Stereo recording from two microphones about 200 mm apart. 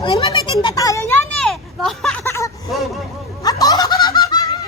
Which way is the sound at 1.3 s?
Centre (ahead or behind).